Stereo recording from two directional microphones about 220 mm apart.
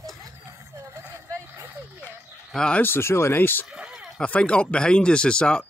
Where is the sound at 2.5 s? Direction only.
5° left (ahead or behind).